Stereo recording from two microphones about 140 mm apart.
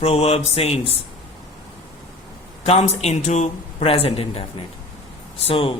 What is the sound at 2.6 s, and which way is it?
A man's voice, 50° left (ahead or behind).